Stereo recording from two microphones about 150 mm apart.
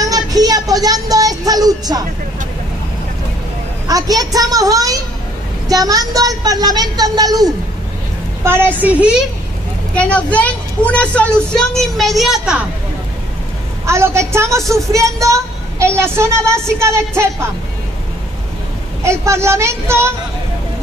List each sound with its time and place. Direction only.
0.0 s music: 25° right (ahead or behind)
3.8 s a woman's voice: 25° right (ahead or behind)
8.5 s speech: 15° right (ahead or behind)
9.9 s a woman's voice: 10° left (ahead or behind)
13.8 s a woman's voice: 20° right (ahead or behind)
19.0 s speech: 20° right (ahead or behind)